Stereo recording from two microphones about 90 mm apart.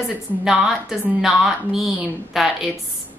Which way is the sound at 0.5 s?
5° right (ahead or behind).